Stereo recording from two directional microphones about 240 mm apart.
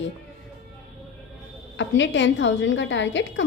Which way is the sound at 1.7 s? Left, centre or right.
Left.